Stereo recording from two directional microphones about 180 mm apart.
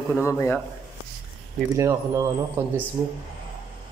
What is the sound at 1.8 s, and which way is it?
Speech, 15° right (ahead or behind).